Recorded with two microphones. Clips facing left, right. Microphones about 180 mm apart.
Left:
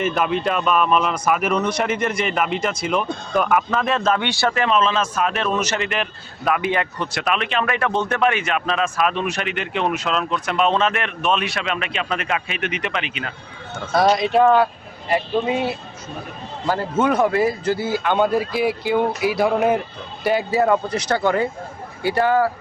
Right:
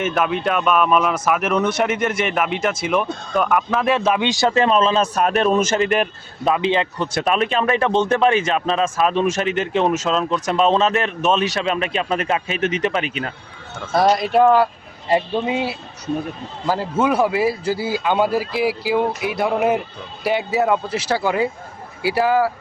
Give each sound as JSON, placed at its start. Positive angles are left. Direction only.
{"t": 0.0, "sound": "speech", "side_deg": 0}
{"t": 3.7, "sound": "speech", "side_deg": -10}
{"t": 4.6, "sound": "speech", "side_deg": -30}
{"t": 6.4, "sound": "speech", "side_deg": -25}
{"t": 13.9, "sound": "speech", "side_deg": -5}
{"t": 15.1, "sound": "speech", "side_deg": -20}
{"t": 16.6, "sound": "speech", "side_deg": -10}